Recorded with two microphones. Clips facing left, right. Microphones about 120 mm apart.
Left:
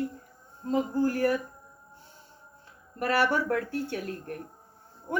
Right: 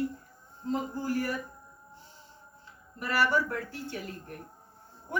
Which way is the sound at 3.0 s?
60° left (ahead or behind).